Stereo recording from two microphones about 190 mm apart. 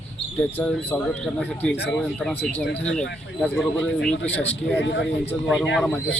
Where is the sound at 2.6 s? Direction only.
80° left.